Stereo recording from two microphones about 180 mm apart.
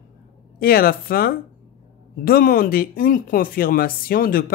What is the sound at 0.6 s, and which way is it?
Speech, 55° left (ahead or behind).